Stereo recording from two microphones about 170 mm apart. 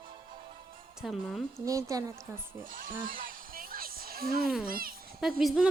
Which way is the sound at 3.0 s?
55° right (ahead or behind).